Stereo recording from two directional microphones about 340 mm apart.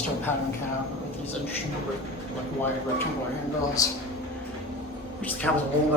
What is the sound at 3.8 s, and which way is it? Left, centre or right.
Speech, centre.